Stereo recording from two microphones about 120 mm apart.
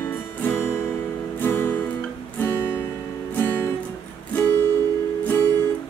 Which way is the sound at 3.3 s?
20° left (ahead or behind).